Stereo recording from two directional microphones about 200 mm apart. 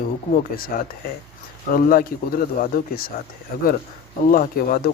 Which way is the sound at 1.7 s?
45° left (ahead or behind).